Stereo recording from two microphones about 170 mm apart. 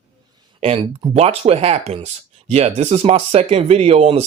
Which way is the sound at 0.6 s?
35° right (ahead or behind).